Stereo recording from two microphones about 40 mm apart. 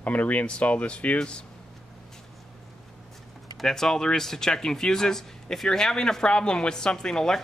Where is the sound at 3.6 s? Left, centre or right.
Centre.